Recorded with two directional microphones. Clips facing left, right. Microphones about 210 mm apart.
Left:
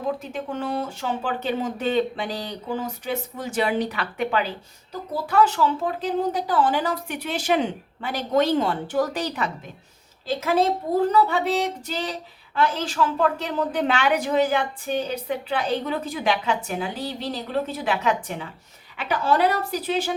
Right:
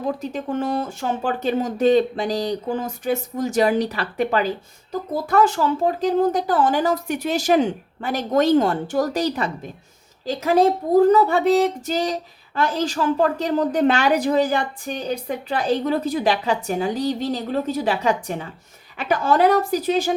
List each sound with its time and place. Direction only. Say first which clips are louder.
0.2 s speech: right 5 dB; 40° right (ahead or behind)
10.9 s a woman's voice: right 6 dB; 45° right (ahead or behind)